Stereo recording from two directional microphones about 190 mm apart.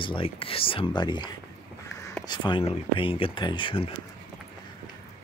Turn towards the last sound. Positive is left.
turn(degrees=25)  # may be behind; listen again after turning